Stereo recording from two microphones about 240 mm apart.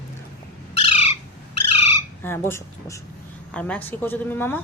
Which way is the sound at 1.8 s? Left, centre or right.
Left.